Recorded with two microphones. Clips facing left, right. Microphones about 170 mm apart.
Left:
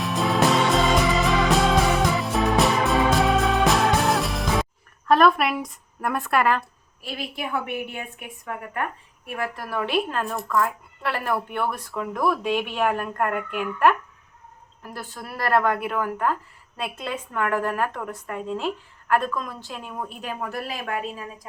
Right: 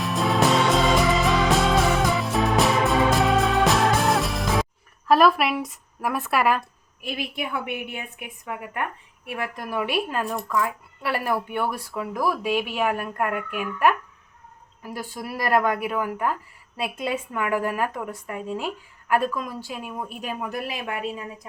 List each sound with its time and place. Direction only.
0.0 s music: centre (ahead or behind)
5.0 s speech: 5° right (ahead or behind)
7.7 s speech: 15° right (ahead or behind)